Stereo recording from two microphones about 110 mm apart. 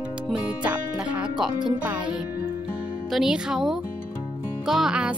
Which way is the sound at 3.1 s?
5° right (ahead or behind).